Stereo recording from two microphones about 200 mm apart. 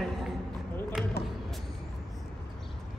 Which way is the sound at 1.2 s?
55° left (ahead or behind).